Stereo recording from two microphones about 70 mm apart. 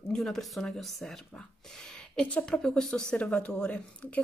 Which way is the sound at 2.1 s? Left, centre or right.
Centre.